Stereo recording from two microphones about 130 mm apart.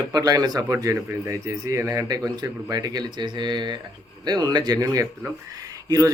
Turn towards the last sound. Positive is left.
turn(degrees=-25)  # may be behind; listen again after turning